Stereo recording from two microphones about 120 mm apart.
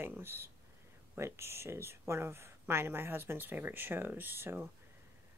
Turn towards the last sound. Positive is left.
turn(degrees=-20)  # may be behind; listen again after turning